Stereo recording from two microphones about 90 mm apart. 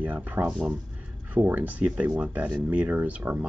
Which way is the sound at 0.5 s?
5° right (ahead or behind).